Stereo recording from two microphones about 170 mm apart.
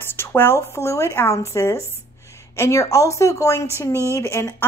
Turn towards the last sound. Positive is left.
turn(degrees=15)  # may be behind; listen again after turning